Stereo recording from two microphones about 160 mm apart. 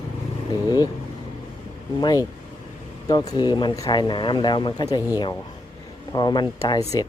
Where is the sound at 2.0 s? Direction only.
25° left (ahead or behind).